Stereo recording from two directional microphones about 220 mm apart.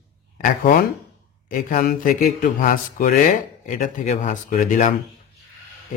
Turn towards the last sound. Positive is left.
turn(degrees=35)  # may be behind; listen again after turning